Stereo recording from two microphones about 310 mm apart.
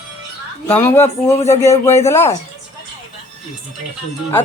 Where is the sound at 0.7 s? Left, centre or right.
Centre.